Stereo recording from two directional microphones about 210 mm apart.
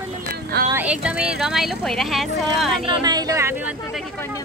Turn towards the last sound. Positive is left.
turn(degrees=-5)  # may be behind; listen again after turning